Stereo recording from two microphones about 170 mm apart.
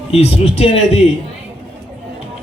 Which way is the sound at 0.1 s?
35° left (ahead or behind).